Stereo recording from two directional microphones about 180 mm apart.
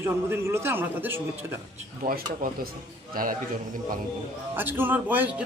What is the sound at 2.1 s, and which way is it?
Speech, 55° right (ahead or behind).